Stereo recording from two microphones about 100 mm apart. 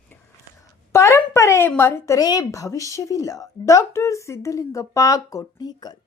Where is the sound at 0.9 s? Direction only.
30° left (ahead or behind).